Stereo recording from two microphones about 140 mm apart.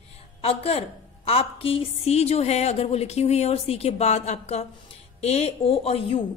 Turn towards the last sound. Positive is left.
turn(degrees=45)  # may be behind; listen again after turning